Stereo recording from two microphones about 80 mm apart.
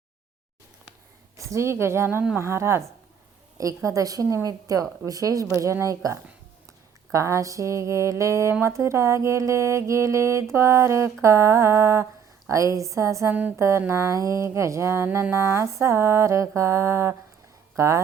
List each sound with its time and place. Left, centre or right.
1.4 s mantra: right
3.8 s speech: right
7.1 s mantra: right
17.7 s speech: right